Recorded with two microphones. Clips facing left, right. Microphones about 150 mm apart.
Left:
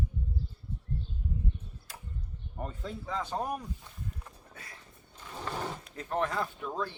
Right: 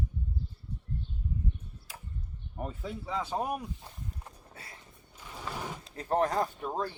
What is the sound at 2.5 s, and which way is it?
Speech, 10° right (ahead or behind).